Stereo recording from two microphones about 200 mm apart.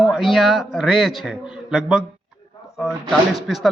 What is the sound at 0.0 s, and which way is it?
Speech, centre (ahead or behind).